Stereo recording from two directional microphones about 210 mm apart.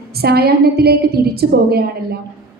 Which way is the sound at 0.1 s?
50° right (ahead or behind).